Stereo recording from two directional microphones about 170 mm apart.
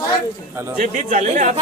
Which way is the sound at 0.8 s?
45° right (ahead or behind).